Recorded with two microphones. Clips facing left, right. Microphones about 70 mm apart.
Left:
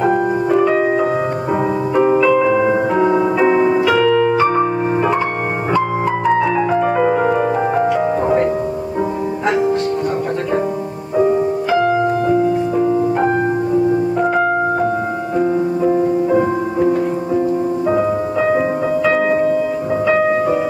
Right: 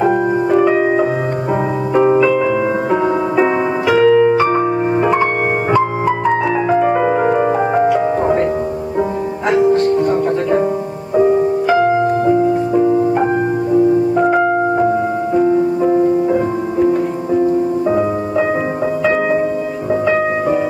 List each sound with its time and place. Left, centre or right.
0.1 s music: centre
4.1 s piano: centre
4.4 s music: centre
6.8 s music: centre
15.3 s music: centre
19.0 s music: centre